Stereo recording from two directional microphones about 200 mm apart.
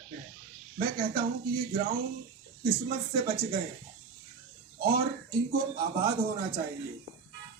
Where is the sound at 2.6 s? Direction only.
50° right (ahead or behind).